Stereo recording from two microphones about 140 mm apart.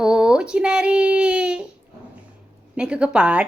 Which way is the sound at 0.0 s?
5° right (ahead or behind).